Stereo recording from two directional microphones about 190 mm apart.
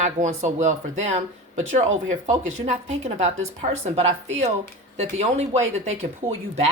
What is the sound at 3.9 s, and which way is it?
Speech, 35° right (ahead or behind).